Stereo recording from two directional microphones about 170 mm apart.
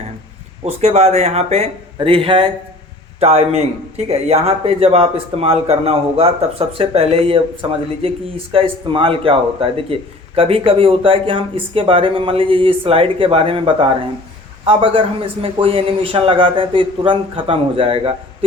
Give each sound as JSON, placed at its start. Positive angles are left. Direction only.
{"t": 0.6, "sound": "a man's voice", "side_deg": -40}